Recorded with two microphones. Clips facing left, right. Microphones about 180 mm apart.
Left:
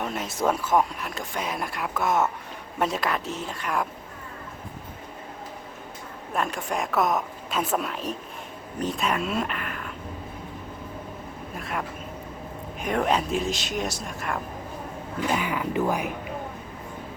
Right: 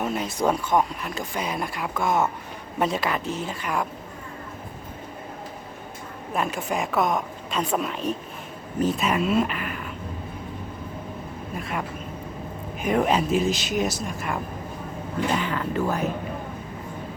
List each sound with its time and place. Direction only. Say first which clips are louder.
0.0 s speech: right 2 dB; centre (ahead or behind)
6.3 s speech: right 1 dB; 5° right (ahead or behind)
11.5 s speech: right 2 dB; centre (ahead or behind)
15.3 s speech: left 1 dB; 10° left (ahead or behind)